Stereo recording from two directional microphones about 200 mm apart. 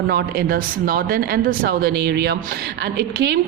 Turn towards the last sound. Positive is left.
turn(degrees=-55)  # may be behind; listen again after turning